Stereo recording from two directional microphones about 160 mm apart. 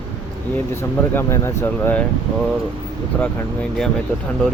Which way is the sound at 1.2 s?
15° left (ahead or behind).